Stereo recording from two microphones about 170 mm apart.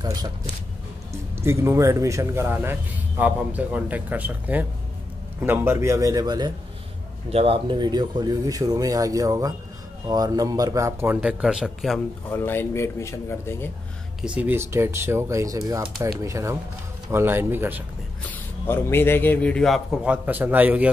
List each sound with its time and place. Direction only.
0.0 s speech: 20° right (ahead or behind)
7.2 s speech: 35° right (ahead or behind); by 12.0 s centre (ahead or behind)
12.3 s speech: 15° left (ahead or behind)
14.2 s speech: 10° right (ahead or behind)
18.2 s speech: 10° left (ahead or behind); by 20.9 s 10° right (ahead or behind)